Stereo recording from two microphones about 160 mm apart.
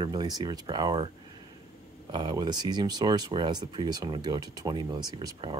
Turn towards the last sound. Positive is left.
turn(degrees=-25)  # may be behind; listen again after turning